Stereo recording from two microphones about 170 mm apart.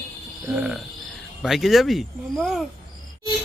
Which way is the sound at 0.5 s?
5° right (ahead or behind).